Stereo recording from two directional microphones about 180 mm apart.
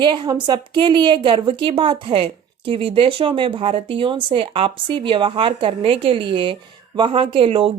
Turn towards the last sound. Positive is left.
turn(degrees=-30)  # may be behind; listen again after turning